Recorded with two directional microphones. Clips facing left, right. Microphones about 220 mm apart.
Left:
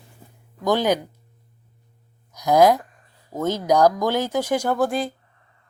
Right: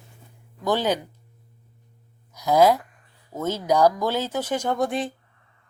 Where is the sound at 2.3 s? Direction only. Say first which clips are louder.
Left 2 dB; 15° left (ahead or behind); by 5.1 s centre (ahead or behind).